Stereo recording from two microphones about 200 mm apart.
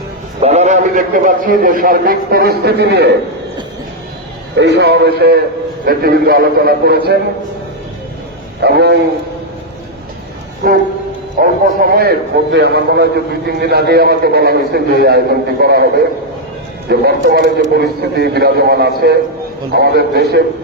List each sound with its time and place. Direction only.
0.4 s a man's voice: 35° right (ahead or behind); by 3.1 s 55° right (ahead or behind)
4.5 s a man's voice: 60° right (ahead or behind)
8.6 s a man's voice: 55° right (ahead or behind)
11.3 s a man's voice: 45° right (ahead or behind)
16.9 s a man's voice: 50° right (ahead or behind)